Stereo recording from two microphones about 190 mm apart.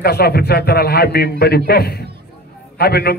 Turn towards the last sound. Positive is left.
turn(degrees=55)  # may be behind; listen again after turning